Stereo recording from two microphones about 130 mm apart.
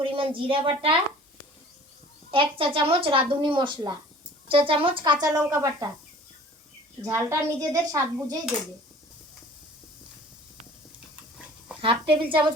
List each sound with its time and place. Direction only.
0.0 s a woman's voice: 40° right (ahead or behind)
2.3 s a woman's voice: 40° right (ahead or behind); by 5.7 s 25° right (ahead or behind)
7.0 s a woman's voice: 20° right (ahead or behind)
11.8 s a woman's voice: 45° right (ahead or behind)